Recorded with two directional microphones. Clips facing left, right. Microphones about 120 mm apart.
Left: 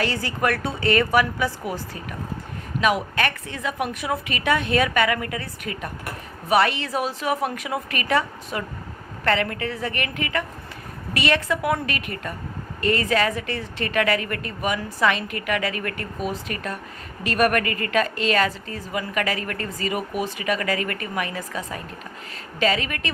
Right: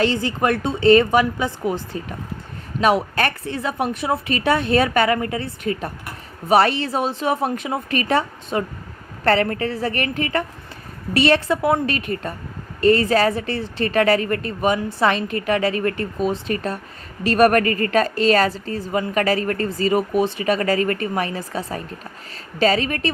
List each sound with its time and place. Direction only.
0.0 s a woman's voice: 25° right (ahead or behind)
2.8 s a woman's voice: 35° right (ahead or behind)